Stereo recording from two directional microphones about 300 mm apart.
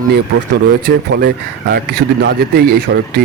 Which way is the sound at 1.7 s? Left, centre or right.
Right.